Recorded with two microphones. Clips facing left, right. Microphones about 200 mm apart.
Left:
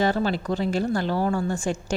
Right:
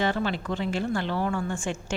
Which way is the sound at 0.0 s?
40° left (ahead or behind).